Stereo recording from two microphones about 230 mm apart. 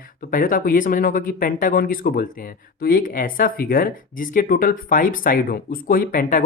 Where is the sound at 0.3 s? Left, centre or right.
Left.